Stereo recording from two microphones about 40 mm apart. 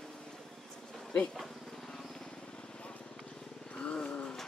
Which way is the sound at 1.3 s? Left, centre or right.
Centre.